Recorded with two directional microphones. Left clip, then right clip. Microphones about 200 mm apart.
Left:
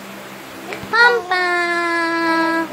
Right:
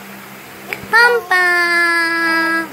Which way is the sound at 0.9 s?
10° right (ahead or behind).